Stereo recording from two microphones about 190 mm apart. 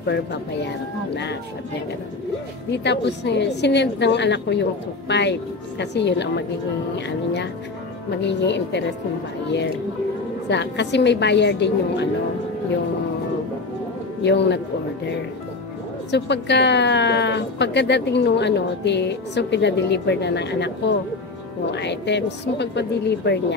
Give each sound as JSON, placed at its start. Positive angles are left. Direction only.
{"t": 0.0, "sound": "speech", "side_deg": 65}
{"t": 2.7, "sound": "speech", "side_deg": 65}
{"t": 8.2, "sound": "speech", "side_deg": 65}
{"t": 10.5, "sound": "speech", "side_deg": 65}
{"t": 14.2, "sound": "speech", "side_deg": 65}
{"t": 16.1, "sound": "speech", "side_deg": 65}